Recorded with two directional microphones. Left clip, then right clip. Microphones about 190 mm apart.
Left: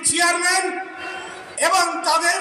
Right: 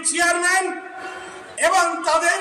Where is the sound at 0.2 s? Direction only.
35° left (ahead or behind).